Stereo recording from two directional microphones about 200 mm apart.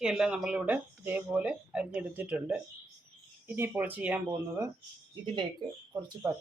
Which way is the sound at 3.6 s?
10° right (ahead or behind).